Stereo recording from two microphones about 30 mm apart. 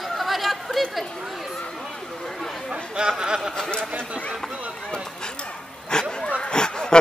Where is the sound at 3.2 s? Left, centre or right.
Right.